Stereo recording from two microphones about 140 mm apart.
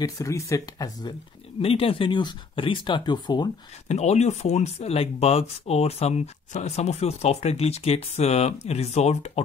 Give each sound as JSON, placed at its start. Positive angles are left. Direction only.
{"t": 0.0, "sound": "speech", "side_deg": 20}
{"t": 1.6, "sound": "speech", "side_deg": 40}
{"t": 3.9, "sound": "speech", "side_deg": 50}